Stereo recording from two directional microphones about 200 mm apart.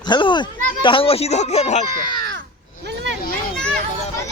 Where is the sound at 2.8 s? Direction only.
65° right (ahead or behind).